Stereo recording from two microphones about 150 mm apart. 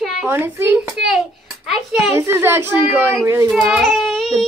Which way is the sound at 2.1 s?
15° right (ahead or behind).